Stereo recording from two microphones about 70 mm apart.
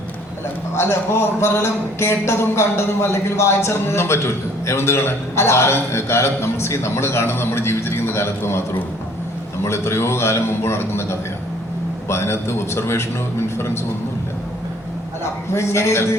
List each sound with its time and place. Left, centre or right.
0.8 s a man's voice: left
15.2 s a man's voice: left